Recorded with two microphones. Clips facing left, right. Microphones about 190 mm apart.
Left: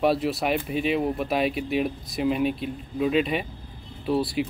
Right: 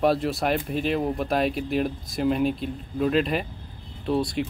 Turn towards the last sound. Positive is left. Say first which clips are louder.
# even
turn(degrees=5)  # may be behind; listen again after turning